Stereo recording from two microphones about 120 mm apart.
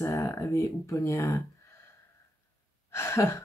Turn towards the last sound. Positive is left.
turn(degrees=20)  # may be behind; listen again after turning